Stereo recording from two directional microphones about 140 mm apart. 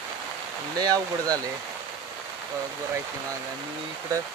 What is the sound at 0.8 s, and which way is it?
Speech, 25° right (ahead or behind).